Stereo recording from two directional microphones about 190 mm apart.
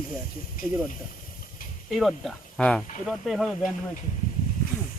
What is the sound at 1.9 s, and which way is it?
Speech, centre (ahead or behind).